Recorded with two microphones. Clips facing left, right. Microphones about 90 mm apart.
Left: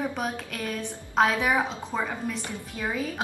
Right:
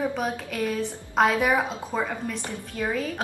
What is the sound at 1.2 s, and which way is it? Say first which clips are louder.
Speech: right 2 dB; 5° right (ahead or behind).